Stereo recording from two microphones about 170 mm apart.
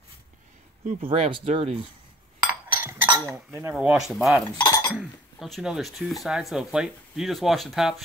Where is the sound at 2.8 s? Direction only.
10° right (ahead or behind).